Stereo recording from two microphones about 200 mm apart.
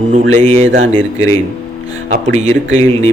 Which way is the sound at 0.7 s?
40° right (ahead or behind).